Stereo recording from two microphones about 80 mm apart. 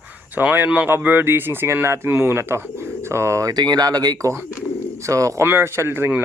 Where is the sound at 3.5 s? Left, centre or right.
Right.